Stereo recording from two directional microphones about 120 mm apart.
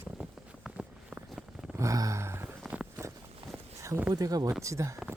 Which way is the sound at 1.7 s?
25° right (ahead or behind).